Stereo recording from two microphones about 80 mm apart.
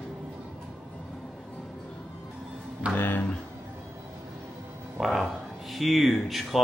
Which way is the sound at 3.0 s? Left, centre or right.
Left.